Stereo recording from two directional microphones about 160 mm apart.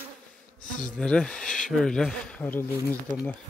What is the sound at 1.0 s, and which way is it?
Speech, 5° left (ahead or behind).